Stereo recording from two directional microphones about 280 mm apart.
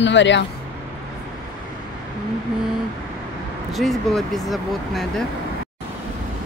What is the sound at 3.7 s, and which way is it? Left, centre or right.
Speech, centre.